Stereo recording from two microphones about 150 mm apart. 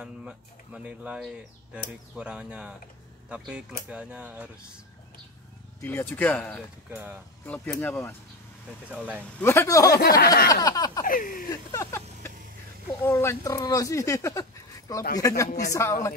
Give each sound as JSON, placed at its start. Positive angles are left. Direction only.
{"t": 0.0, "sound": "speech", "side_deg": -5}
{"t": 5.8, "sound": "speech", "side_deg": 15}
{"t": 6.9, "sound": "speech", "side_deg": -10}
{"t": 7.4, "sound": "speech", "side_deg": 10}
{"t": 8.9, "sound": "speech", "side_deg": -10}
{"t": 9.4, "sound": "speech", "side_deg": 15}
{"t": 9.8, "sound": "speech", "side_deg": 90}
{"t": 10.5, "sound": "a sound", "side_deg": 25}
{"t": 11.1, "sound": "speech", "side_deg": 70}
{"t": 11.7, "sound": "vehicle", "side_deg": 15}
{"t": 13.0, "sound": "speech", "side_deg": 15}